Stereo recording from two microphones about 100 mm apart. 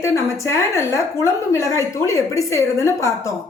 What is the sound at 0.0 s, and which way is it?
A woman's voice, 30° left (ahead or behind).